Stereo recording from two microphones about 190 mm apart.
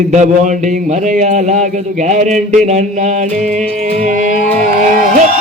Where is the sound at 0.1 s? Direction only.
40° right (ahead or behind).